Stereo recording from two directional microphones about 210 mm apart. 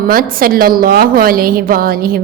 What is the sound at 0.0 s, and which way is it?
A woman's voice, 45° right (ahead or behind).